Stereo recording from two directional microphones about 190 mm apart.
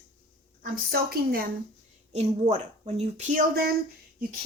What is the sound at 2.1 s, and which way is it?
Speech, 35° right (ahead or behind).